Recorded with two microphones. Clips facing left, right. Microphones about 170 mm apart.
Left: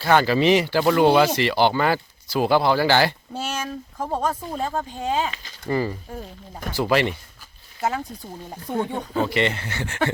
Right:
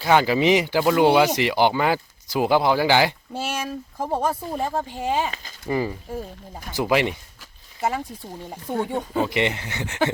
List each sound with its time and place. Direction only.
0.0 s speech: 15° right (ahead or behind)
7.8 s speech: 5° right (ahead or behind)
9.3 s speech: 15° right (ahead or behind)